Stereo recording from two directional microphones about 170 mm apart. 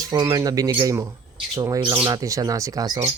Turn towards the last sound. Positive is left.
turn(degrees=-20)  # may be behind; listen again after turning